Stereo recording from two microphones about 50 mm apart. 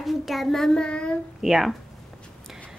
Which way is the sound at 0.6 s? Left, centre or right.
Centre.